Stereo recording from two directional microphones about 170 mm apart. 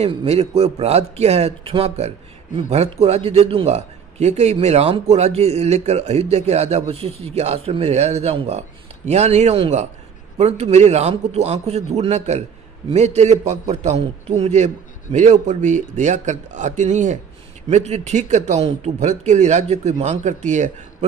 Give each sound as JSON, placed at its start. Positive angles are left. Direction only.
{"t": 0.0, "sound": "a man's voice", "side_deg": -35}